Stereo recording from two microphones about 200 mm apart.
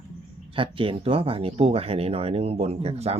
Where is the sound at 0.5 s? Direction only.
25° right (ahead or behind).